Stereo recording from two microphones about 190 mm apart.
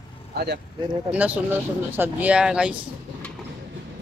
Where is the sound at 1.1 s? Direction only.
5° right (ahead or behind).